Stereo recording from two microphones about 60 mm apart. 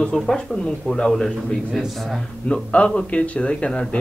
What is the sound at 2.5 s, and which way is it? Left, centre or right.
Speech, centre.